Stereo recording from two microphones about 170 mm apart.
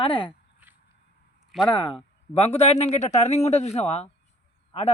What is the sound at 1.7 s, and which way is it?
Speech, 30° left (ahead or behind).